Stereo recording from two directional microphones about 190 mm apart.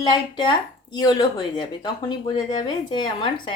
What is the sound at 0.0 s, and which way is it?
Speech, 25° left (ahead or behind).